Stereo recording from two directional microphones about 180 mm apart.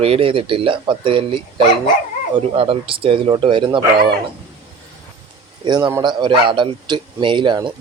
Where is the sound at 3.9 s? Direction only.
60° right (ahead or behind).